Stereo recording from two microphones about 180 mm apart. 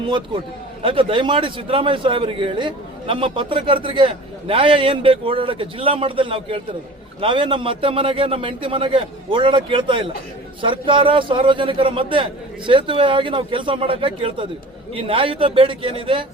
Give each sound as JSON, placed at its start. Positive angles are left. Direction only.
{"t": 0.8, "sound": "a man's voice", "side_deg": -30}